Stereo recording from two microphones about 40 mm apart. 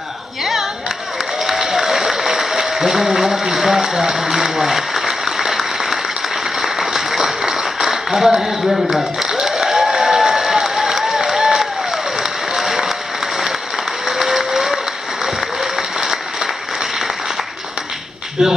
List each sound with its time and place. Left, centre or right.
0.4 s a sound: centre
1.4 s applause: centre
6.8 s a sound: centre
9.3 s applause: centre
14.0 s music: centre
14.4 s applause: centre
18.4 s speech: centre